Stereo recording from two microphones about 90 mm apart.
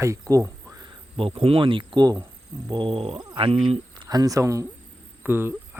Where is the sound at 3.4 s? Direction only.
80° right.